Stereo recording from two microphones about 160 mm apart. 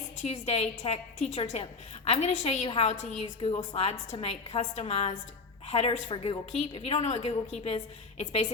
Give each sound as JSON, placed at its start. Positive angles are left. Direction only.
{"t": 0.2, "sound": "a woman's voice", "side_deg": 40}